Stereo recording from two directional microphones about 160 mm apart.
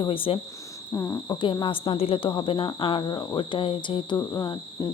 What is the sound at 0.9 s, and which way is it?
Speech, 20° left (ahead or behind).